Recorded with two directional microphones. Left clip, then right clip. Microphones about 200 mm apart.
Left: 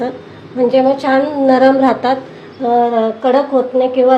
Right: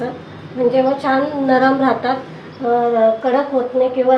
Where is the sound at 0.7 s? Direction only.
45° left (ahead or behind).